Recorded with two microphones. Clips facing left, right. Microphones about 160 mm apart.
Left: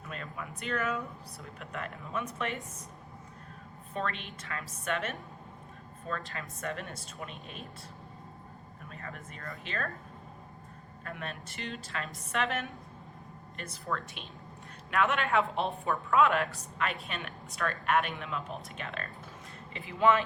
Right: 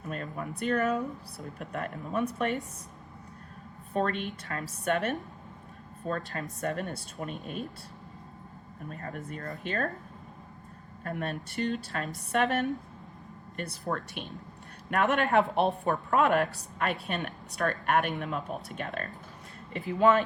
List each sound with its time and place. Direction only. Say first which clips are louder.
0.0 s a sound: right 5 dB; 40° right (ahead or behind)
0.6 s speech: right 6 dB; 40° right (ahead or behind)
3.9 s a woman's voice: right 7 dB; 40° right (ahead or behind)
8.9 s speech: right 7 dB; 40° right (ahead or behind)
11.0 s speech: right 7 dB; 45° right (ahead or behind)
13.8 s a woman's voice: right 2 dB; 45° right (ahead or behind)
15.5 s a woman's voice: right 5 dB; 60° right (ahead or behind)
16.0 s a woman's voice: right 1 dB; 45° right (ahead or behind)